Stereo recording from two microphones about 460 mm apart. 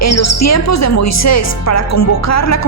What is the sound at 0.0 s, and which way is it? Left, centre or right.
Speech, left.